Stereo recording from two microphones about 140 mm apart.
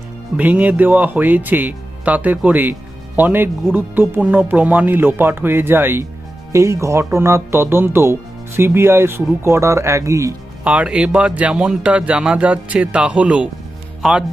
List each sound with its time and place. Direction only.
0.3 s speech: 10° right (ahead or behind)
10.6 s speech: 10° right (ahead or behind)